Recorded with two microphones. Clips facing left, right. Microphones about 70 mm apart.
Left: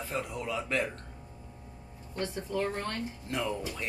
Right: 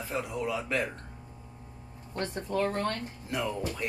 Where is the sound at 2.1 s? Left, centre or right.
Right.